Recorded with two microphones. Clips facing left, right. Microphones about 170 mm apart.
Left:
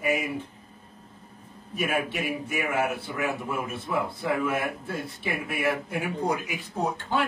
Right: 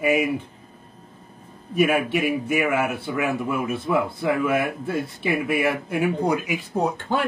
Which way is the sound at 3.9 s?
80° right.